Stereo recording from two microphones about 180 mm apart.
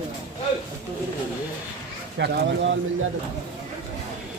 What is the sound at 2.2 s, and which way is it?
Speech, 80° right.